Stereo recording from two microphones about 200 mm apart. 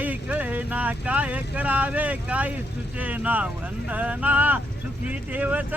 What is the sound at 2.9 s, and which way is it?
Speech, 5° right (ahead or behind).